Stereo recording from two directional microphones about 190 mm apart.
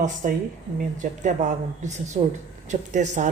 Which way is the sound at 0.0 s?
40° right (ahead or behind).